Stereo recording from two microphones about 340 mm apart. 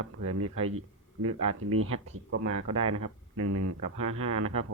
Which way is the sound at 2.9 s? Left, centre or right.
Right.